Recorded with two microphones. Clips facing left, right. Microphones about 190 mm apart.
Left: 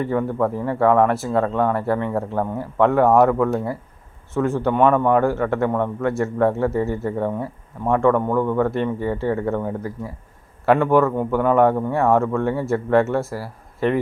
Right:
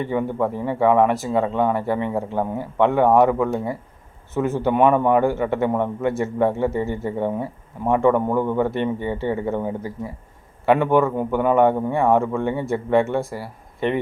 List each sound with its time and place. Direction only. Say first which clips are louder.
0.0 s speech: left 1 dB; centre (ahead or behind)